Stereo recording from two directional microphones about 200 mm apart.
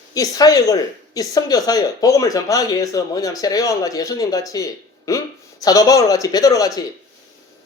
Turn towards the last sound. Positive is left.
turn(degrees=15)  # may be behind; listen again after turning